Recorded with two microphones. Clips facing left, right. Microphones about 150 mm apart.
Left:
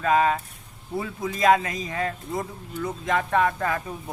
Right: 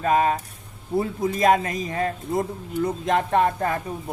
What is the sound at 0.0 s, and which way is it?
A man's voice, 35° right (ahead or behind).